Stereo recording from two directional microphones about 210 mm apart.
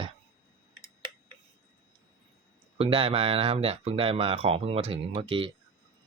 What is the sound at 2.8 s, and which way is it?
Speech, 25° right (ahead or behind).